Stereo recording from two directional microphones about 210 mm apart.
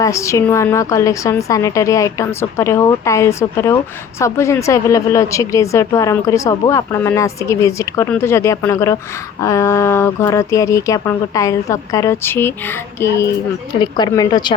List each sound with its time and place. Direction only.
0.0 s a woman's voice: 15° left (ahead or behind)